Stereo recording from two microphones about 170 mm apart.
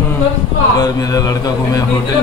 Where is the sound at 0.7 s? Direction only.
20° left (ahead or behind).